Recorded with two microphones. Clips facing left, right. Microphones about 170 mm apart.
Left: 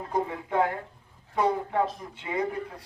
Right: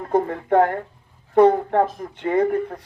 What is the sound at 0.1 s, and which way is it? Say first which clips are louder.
Speech: right 10 dB; 55° right (ahead or behind).